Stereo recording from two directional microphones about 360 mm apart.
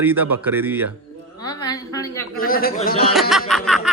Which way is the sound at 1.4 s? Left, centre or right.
Centre.